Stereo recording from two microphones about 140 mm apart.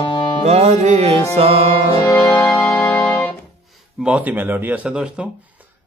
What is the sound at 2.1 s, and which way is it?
Music, 25° left (ahead or behind).